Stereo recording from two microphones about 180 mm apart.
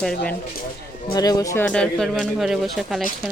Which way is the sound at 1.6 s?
5° left (ahead or behind).